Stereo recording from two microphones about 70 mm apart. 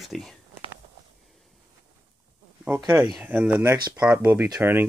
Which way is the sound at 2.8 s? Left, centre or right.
Right.